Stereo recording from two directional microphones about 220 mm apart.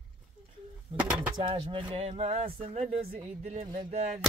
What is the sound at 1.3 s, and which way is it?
Speech, 20° right (ahead or behind).